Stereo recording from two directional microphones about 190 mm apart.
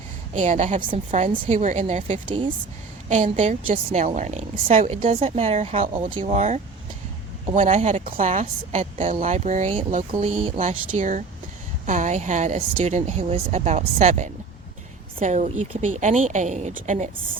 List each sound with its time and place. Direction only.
0.3 s a woman's voice: 40° right (ahead or behind)
2.2 s speech: 25° right (ahead or behind)
3.1 s a woman's voice: 40° right (ahead or behind)
10.6 s a woman's voice: 40° right (ahead or behind)